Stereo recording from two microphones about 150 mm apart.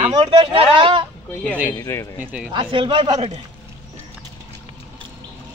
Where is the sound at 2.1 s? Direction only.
10° right (ahead or behind).